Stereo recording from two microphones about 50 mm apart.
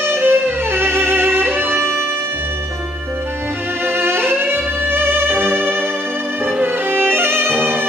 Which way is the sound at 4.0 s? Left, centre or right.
Right.